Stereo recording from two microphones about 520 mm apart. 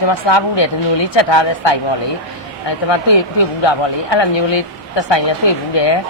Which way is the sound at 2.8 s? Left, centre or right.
Left.